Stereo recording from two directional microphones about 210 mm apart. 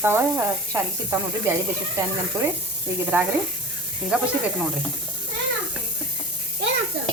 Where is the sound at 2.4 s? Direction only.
15° right (ahead or behind).